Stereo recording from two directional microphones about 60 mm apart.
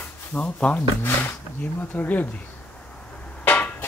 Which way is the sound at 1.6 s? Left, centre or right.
Left.